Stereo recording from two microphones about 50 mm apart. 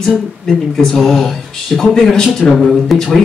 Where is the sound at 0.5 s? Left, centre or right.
Centre.